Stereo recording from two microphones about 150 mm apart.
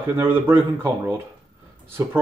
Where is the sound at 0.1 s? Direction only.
15° right (ahead or behind).